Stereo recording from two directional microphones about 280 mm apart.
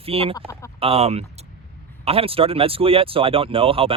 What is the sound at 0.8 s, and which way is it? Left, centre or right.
Speech, right.